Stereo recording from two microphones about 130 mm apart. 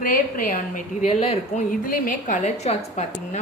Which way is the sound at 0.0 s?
90° left.